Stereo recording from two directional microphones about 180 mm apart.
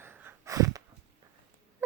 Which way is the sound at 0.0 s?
15° right (ahead or behind).